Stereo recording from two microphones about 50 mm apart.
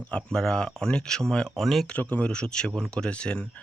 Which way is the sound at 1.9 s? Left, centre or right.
Left.